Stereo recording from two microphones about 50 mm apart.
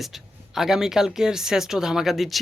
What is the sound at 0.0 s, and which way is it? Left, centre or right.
Speech, centre.